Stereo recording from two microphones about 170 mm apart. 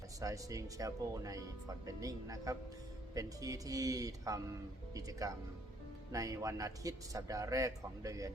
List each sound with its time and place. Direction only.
0.2 s speech: 20° right (ahead or behind)